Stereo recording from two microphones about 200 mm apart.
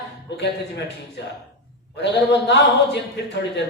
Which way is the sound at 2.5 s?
60° left (ahead or behind).